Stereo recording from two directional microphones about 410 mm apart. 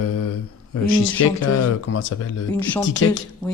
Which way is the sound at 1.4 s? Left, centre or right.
Left.